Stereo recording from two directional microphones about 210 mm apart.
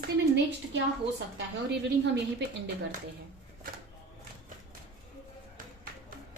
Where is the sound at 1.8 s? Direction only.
55° right (ahead or behind).